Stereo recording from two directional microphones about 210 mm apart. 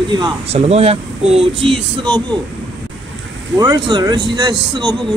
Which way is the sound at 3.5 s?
20° right (ahead or behind).